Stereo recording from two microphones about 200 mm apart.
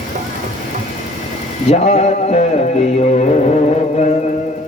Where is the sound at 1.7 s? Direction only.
35° left (ahead or behind).